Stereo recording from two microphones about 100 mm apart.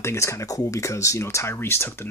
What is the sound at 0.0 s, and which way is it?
Speech, 30° left (ahead or behind).